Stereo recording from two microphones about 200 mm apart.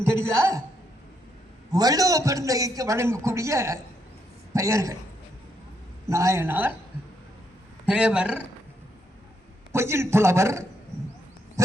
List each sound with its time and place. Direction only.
0.2 s a woman's voice: 10° right (ahead or behind)
1.7 s a man's voice: 20° right (ahead or behind)
6.1 s a man's voice: 15° right (ahead or behind)
7.9 s a man's voice: 5° right (ahead or behind)
9.7 s a man's voice: 10° right (ahead or behind)